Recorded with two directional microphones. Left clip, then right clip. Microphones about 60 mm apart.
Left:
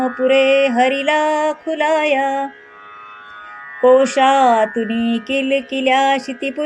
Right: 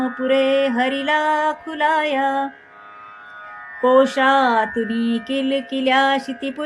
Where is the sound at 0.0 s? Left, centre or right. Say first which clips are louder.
Left 4 dB; left.